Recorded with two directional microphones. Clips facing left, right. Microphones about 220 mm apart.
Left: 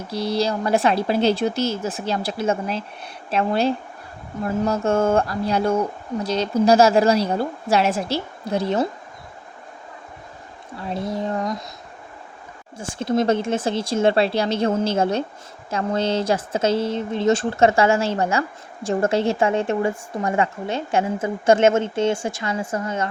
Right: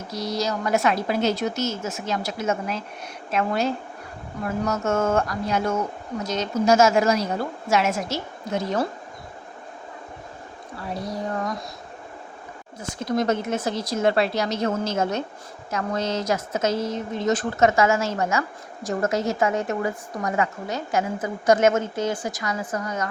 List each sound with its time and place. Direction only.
0.1 s speech: 30° left (ahead or behind)
10.8 s speech: 25° left (ahead or behind)
12.8 s speech: 30° left (ahead or behind)